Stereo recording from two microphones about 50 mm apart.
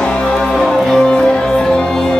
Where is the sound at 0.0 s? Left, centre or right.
Centre.